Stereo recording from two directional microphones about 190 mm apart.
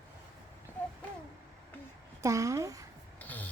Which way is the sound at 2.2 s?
15° right (ahead or behind).